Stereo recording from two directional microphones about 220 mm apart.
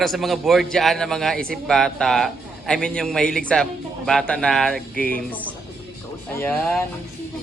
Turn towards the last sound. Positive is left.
turn(degrees=5)  # may be behind; listen again after turning